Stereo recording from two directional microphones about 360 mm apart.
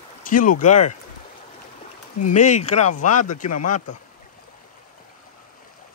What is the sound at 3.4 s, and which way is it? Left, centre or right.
Speech, left.